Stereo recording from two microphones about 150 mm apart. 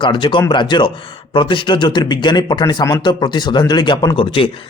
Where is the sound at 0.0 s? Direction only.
35° left (ahead or behind).